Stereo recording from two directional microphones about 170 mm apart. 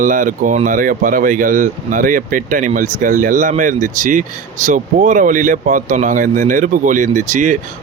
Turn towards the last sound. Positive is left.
turn(degrees=-50)  # may be behind; listen again after turning